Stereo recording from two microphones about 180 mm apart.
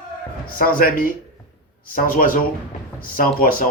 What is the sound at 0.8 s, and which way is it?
Speech, 50° left (ahead or behind).